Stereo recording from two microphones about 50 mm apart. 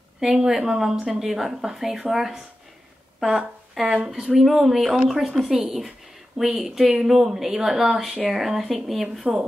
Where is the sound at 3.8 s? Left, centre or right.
Centre.